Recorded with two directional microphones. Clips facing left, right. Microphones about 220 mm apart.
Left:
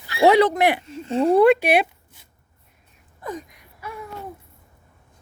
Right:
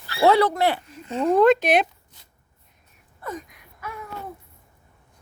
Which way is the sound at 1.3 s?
10° left (ahead or behind).